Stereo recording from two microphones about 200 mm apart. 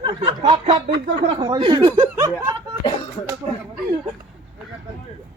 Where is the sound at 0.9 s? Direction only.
45° right (ahead or behind).